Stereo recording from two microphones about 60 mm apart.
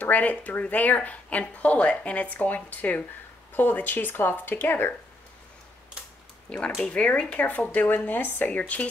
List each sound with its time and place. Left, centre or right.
0.0 s speech: left
6.8 s speech: centre